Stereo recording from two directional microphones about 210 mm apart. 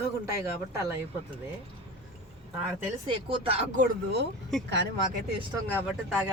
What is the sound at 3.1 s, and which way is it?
Speech, 25° right (ahead or behind).